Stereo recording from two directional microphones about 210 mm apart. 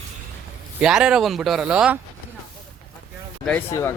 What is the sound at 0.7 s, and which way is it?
Speech, 5° right (ahead or behind).